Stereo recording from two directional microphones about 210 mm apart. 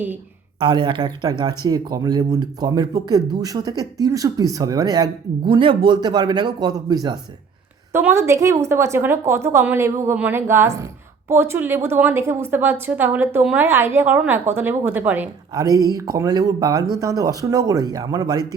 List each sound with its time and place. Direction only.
0.6 s speech: 20° right (ahead or behind)